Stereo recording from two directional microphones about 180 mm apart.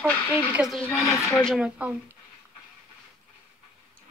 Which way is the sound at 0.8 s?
15° left (ahead or behind).